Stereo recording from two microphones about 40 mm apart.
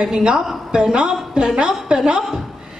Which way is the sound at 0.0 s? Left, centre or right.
Right.